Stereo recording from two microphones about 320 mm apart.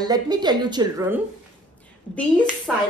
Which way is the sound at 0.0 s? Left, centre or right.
Centre.